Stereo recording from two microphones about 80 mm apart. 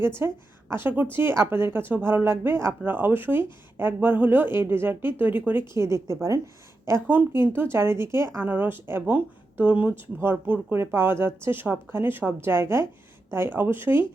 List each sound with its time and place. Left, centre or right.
0.0 s speech: right
5.7 s speech: right